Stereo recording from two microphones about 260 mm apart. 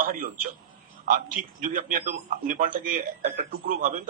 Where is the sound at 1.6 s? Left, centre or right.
Right.